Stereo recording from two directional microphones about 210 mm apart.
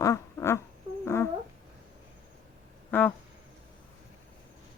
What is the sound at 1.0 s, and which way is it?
Cat, 10° left (ahead or behind).